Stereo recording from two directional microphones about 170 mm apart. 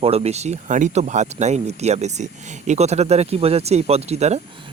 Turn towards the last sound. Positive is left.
turn(degrees=-35)  # may be behind; listen again after turning